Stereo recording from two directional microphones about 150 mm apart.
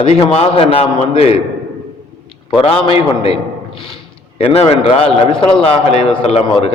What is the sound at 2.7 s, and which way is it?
Speech, 40° left (ahead or behind).